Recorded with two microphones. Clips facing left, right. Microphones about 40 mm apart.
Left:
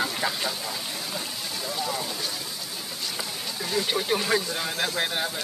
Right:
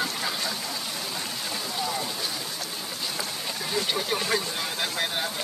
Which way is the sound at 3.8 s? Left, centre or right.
Centre.